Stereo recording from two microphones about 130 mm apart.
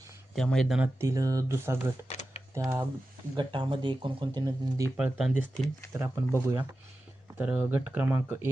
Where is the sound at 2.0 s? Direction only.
55° left (ahead or behind).